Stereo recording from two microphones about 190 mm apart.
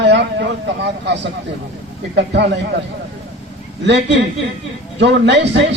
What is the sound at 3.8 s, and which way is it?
A man's voice, 65° right (ahead or behind).